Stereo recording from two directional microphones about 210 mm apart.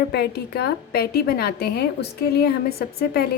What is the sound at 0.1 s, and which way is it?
A woman's voice, 50° left (ahead or behind).